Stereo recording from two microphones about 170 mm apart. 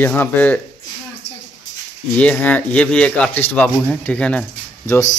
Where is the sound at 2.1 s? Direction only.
10° left (ahead or behind).